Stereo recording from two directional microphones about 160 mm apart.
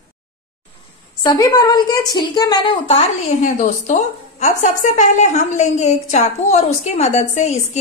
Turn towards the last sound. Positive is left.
turn(degrees=45)  # may be behind; listen again after turning